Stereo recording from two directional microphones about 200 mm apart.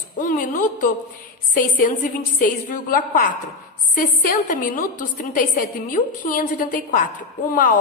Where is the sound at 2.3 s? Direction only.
45° left (ahead or behind).